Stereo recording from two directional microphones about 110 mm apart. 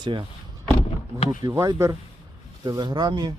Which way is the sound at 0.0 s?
45° right (ahead or behind).